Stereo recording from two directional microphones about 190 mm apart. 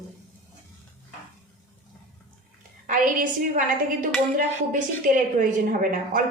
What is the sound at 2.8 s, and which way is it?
Speech, 45° right (ahead or behind).